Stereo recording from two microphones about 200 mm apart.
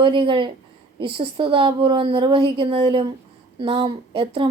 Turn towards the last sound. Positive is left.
turn(degrees=-25)  # may be behind; listen again after turning